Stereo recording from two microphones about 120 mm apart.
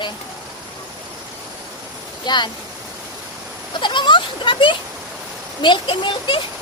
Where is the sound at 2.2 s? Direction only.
40° left (ahead or behind).